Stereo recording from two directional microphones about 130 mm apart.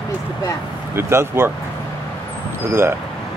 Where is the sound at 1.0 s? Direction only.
20° right (ahead or behind).